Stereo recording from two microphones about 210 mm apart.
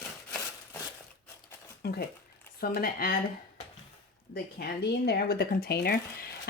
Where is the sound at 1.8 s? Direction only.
50° left (ahead or behind).